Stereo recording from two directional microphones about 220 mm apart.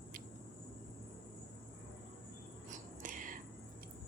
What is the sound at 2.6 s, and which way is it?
Whispering, 35° right (ahead or behind).